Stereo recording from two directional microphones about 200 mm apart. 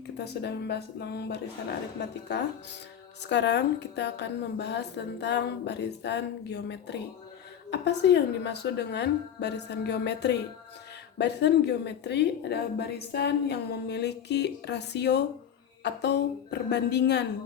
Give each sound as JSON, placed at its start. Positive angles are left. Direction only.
{"t": 0.4, "sound": "a woman's voice", "side_deg": 55}